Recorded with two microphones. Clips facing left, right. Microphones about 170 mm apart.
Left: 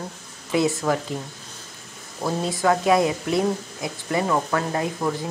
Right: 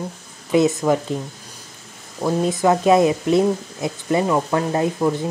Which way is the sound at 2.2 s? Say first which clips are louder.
Right 5 dB; 20° right (ahead or behind).